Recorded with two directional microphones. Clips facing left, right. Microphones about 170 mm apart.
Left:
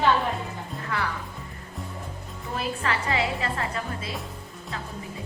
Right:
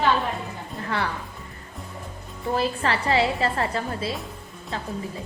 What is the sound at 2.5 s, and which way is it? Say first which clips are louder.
A woman's voice: right 4 dB; 30° right (ahead or behind).